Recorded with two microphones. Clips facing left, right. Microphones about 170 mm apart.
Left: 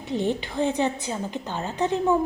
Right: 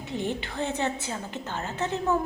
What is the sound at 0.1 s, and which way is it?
A woman's voice, 15° left (ahead or behind).